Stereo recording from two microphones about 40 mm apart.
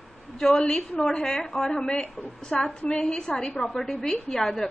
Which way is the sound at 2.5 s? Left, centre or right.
Left.